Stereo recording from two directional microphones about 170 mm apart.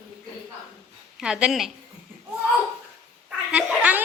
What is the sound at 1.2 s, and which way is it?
Speech, 5° right (ahead or behind).